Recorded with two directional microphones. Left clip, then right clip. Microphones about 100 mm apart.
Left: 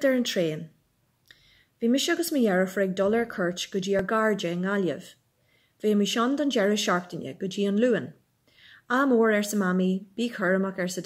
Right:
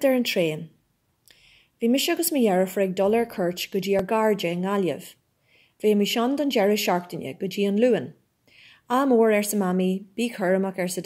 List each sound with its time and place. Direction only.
0.0 s a woman's voice: 40° right (ahead or behind)
1.4 s a sound: 40° left (ahead or behind)
1.9 s a woman's voice: 40° right (ahead or behind)